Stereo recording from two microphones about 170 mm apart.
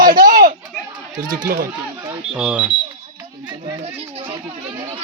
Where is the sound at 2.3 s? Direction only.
5° right (ahead or behind).